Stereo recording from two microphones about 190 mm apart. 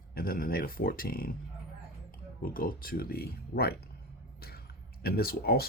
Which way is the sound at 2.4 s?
50° left (ahead or behind).